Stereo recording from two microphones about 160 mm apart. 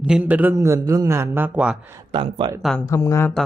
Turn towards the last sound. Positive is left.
turn(degrees=15)  # may be behind; listen again after turning